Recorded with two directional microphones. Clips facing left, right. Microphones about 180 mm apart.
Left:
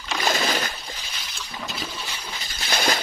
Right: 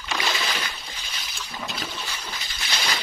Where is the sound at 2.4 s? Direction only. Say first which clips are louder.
Left 7 dB; 45° left (ahead or behind).